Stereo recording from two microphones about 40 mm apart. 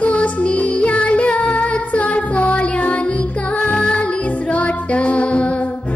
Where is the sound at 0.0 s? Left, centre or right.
Left.